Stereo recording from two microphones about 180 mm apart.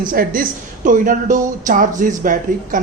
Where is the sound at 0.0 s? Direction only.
50° right (ahead or behind).